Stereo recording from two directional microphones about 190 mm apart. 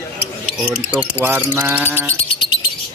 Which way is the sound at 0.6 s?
5° right (ahead or behind).